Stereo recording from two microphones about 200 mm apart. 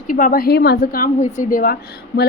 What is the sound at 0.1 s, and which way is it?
A woman's voice, 45° left (ahead or behind).